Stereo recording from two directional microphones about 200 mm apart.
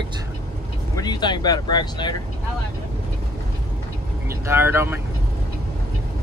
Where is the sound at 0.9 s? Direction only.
20° left (ahead or behind).